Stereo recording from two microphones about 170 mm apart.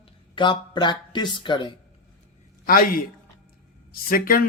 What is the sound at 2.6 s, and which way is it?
Speech, 55° left (ahead or behind).